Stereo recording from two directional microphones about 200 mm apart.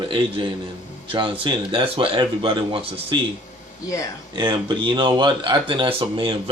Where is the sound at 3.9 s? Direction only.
15° left (ahead or behind).